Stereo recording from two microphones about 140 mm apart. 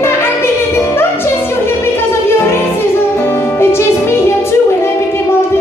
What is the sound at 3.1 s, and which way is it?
Music, 15° left (ahead or behind).